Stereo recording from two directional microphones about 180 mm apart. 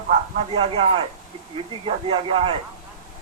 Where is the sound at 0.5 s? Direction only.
35° right (ahead or behind).